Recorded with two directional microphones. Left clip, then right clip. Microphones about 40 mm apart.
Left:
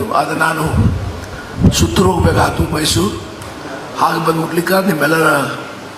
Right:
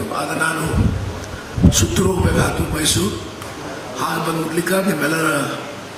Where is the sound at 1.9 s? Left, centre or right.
Left.